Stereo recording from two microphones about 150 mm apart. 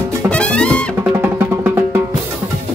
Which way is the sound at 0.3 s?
5° left (ahead or behind).